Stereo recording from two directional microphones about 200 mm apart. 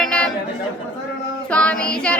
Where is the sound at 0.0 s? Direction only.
5° left (ahead or behind).